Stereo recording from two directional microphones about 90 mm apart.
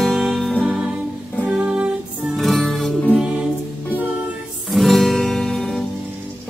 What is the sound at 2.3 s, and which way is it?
Music, centre (ahead or behind).